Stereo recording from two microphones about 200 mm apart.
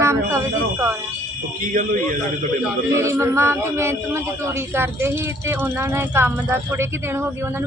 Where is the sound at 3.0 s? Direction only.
15° right (ahead or behind).